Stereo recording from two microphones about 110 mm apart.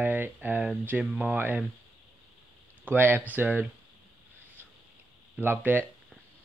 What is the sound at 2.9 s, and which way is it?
Speech, 15° right (ahead or behind).